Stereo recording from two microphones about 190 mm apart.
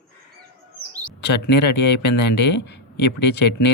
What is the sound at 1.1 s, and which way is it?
Speech, 65° left (ahead or behind).